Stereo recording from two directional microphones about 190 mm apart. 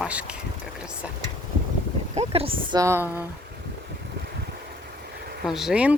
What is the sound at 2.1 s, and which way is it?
Speech, 30° right (ahead or behind).